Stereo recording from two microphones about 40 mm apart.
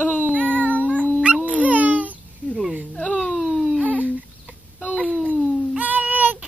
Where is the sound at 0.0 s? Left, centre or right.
Left.